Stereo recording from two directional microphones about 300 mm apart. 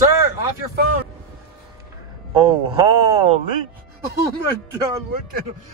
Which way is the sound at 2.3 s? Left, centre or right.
Centre.